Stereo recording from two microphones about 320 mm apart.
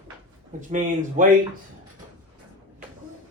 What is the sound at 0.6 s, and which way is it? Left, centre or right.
Speech, right.